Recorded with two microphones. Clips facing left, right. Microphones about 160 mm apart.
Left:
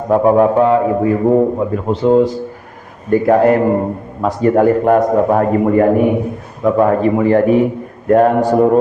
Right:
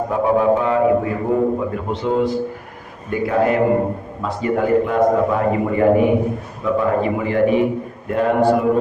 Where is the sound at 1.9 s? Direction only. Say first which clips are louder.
Left 9 dB; 35° left (ahead or behind).